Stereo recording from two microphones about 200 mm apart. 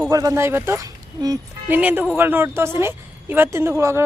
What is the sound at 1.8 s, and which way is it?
A woman's voice, 5° right (ahead or behind).